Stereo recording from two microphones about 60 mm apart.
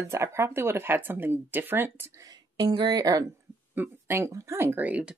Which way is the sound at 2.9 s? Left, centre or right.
Right.